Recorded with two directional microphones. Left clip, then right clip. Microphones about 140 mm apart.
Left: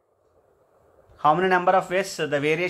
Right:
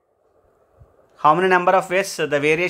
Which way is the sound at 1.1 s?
35° right (ahead or behind).